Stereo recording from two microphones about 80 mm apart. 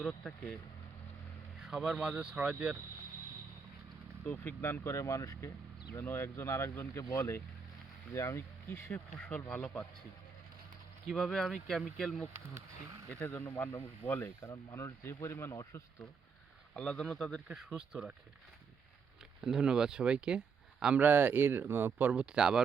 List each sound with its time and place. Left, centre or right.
1.6 s speech: centre
4.3 s speech: left
5.9 s speech: left
8.9 s a man's voice: centre
11.1 s speech: centre
13.1 s speech: left
14.5 s speech: left
16.7 s a man's voice: centre
17.7 s speech: centre
19.4 s speech: centre
21.0 s speech: right